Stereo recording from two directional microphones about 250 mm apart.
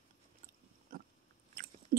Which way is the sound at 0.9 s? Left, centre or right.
Right.